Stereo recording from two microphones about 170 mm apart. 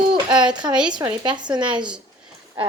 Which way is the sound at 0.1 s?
25° right (ahead or behind).